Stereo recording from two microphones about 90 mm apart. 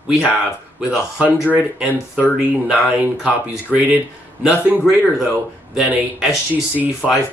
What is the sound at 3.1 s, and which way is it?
Speech, 5° right (ahead or behind).